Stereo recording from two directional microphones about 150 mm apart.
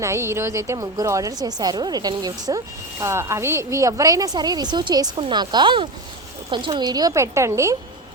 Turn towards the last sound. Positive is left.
turn(degrees=-20)  # may be behind; listen again after turning